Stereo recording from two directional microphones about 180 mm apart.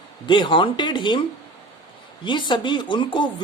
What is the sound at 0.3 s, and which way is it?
Speech, 25° left (ahead or behind).